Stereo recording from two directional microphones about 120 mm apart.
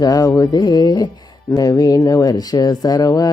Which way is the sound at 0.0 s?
30° left (ahead or behind).